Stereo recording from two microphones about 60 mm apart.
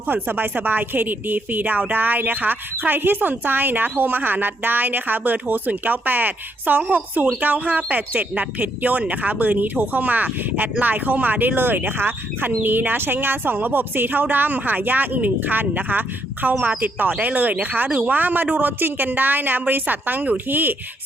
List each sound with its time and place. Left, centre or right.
0.1 s speech: right